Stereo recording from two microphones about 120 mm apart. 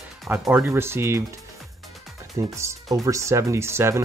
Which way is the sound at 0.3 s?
15° right (ahead or behind).